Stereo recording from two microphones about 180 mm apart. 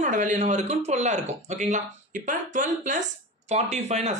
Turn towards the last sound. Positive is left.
turn(degrees=-40)  # may be behind; listen again after turning